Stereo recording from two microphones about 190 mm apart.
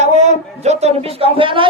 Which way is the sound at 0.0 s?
40° right (ahead or behind).